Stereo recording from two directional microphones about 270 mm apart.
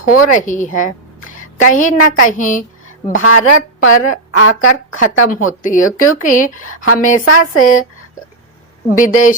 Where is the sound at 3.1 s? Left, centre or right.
Left.